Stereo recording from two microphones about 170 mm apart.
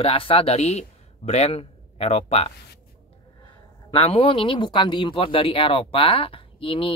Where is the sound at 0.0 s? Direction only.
35° left (ahead or behind).